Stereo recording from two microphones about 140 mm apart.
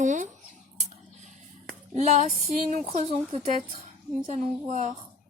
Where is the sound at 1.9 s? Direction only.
60° right (ahead or behind).